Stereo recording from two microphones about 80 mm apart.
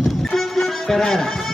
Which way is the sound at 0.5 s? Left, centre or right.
Centre.